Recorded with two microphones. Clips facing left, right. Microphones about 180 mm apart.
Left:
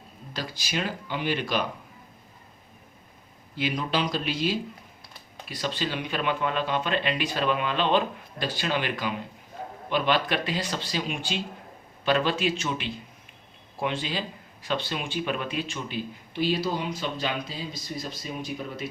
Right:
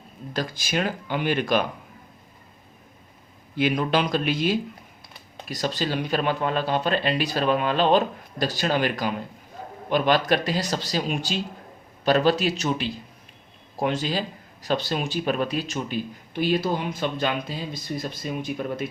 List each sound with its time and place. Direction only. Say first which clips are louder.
0.3 s speech: right 5 dB; 50° right (ahead or behind)
3.5 s speech: right 6 dB; 55° right (ahead or behind)
5.5 s speech: right 4 dB; 40° right (ahead or behind)